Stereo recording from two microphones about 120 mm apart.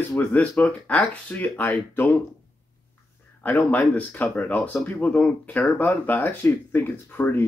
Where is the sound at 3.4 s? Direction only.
15° left (ahead or behind).